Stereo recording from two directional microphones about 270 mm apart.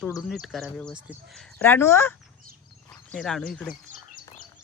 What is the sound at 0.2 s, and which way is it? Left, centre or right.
Speech, centre.